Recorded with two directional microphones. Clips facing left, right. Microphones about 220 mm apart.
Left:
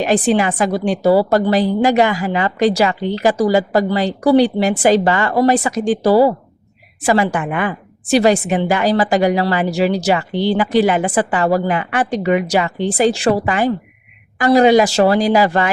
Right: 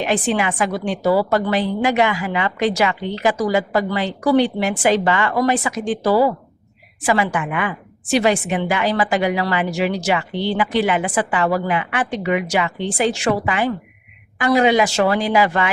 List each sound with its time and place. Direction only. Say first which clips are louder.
0.0 s a woman's voice: left 5 dB; 35° left (ahead or behind)